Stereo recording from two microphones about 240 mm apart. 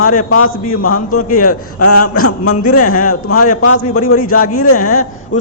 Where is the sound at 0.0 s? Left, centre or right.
Left.